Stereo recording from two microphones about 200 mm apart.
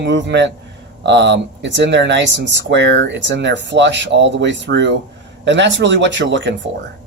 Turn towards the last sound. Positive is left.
turn(degrees=-65)  # may be behind; listen again after turning